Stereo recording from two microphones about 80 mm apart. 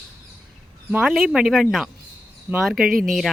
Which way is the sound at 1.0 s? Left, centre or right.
Centre.